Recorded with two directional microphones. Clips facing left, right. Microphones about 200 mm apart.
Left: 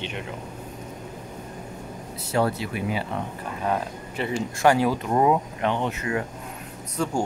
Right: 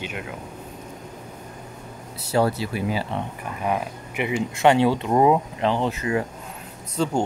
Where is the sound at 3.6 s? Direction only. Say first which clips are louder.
Right 1 dB; 10° right (ahead or behind).